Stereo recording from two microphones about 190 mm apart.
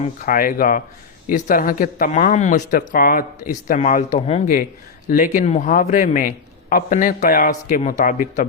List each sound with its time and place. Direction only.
0.0 s speech: 45° left (ahead or behind)